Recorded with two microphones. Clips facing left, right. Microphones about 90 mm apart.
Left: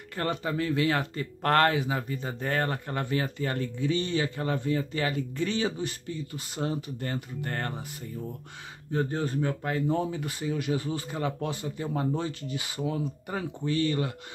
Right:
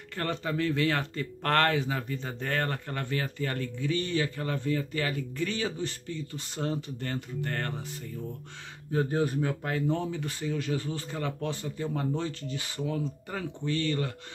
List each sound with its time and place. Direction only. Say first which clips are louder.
0.1 s speech: left 2 dB; 10° left (ahead or behind)
8.9 s speech: right 1 dB; 10° right (ahead or behind)
9.8 s speech: left 2 dB; 15° left (ahead or behind)